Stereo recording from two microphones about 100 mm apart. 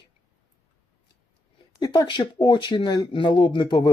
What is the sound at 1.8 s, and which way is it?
Speech, 40° left (ahead or behind).